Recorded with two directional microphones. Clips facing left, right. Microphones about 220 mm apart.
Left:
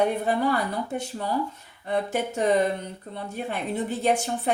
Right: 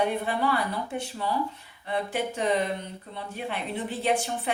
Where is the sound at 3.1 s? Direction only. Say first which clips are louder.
Left 3 dB; 45° left (ahead or behind).